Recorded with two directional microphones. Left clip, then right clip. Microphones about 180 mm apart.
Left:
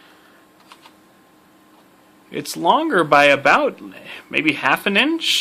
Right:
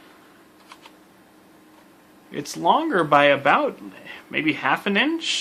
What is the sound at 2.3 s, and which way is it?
Speech, 45° left (ahead or behind).